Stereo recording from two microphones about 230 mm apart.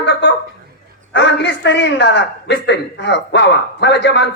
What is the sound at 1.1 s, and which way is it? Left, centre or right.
A man's voice, left.